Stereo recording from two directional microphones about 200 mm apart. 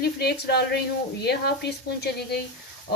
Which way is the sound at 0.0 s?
55° left (ahead or behind).